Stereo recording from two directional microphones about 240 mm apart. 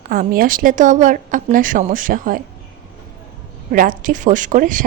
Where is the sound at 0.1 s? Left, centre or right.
Right.